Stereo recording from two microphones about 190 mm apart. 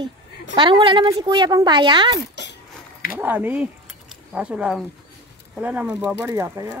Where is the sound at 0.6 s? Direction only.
25° right (ahead or behind).